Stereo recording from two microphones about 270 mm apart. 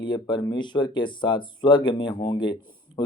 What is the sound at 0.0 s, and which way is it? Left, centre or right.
Speech, centre.